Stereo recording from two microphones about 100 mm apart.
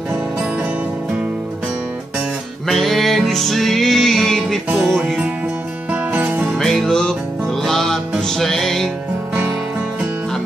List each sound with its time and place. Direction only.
2.7 s music: centre (ahead or behind)
6.1 s music: 15° right (ahead or behind)
6.6 s music: 5° left (ahead or behind)